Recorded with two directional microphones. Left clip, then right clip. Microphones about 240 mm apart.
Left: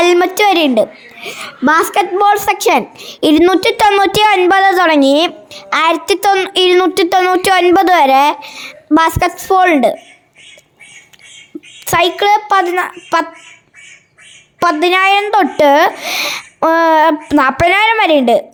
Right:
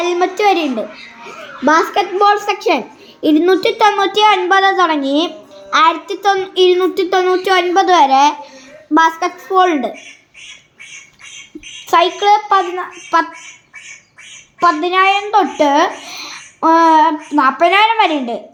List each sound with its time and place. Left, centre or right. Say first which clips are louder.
0.0 s a child's voice: left 4 dB; left
11.9 s a child's voice: even; left
14.6 s a child's voice: left 1 dB; left